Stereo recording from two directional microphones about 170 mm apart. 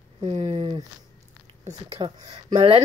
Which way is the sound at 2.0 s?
30° right (ahead or behind).